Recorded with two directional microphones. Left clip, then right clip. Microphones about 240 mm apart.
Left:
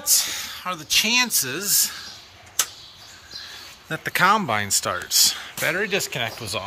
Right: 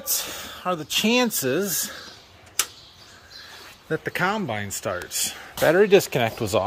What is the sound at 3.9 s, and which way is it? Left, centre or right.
Speech, centre.